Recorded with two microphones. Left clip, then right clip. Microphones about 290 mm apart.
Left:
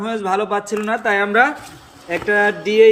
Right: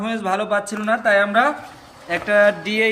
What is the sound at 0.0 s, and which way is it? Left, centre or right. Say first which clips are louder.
Speech: left 2 dB; centre.